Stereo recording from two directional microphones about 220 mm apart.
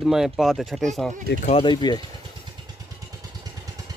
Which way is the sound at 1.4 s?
20° left (ahead or behind).